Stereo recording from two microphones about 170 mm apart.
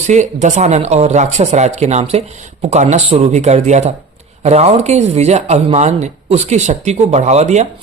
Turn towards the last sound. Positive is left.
turn(degrees=-40)  # may be behind; listen again after turning